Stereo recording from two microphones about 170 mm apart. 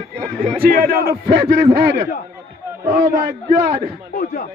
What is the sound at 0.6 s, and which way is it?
Speech, 60° right (ahead or behind).